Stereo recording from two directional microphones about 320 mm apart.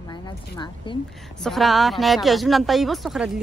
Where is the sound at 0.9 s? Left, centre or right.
Centre.